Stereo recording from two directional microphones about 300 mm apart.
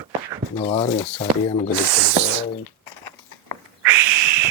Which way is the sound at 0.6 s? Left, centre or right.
Left.